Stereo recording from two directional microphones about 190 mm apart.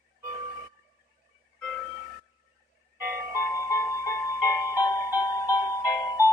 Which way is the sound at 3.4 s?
15° left (ahead or behind).